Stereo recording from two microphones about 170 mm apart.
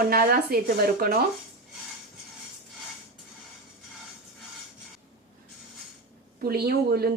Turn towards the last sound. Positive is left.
turn(degrees=-65)  # may be behind; listen again after turning